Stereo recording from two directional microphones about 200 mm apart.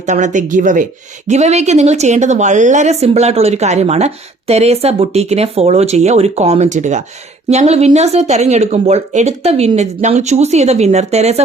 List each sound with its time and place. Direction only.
0.0 s speech: 35° right (ahead or behind)